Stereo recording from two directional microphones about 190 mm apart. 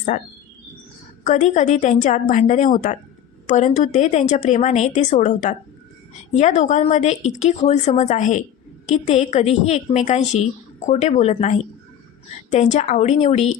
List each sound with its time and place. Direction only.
1.2 s a woman's voice: 40° left (ahead or behind)